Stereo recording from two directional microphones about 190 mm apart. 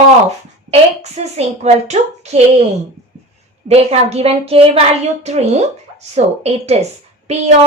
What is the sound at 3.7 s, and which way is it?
A woman's voice, 30° right (ahead or behind).